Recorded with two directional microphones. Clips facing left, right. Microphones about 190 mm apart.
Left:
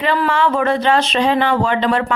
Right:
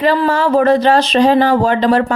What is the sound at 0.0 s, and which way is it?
Speech, 40° right (ahead or behind).